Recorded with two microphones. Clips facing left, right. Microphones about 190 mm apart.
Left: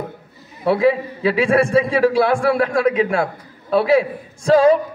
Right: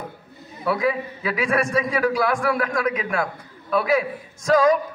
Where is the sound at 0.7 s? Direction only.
30° left (ahead or behind).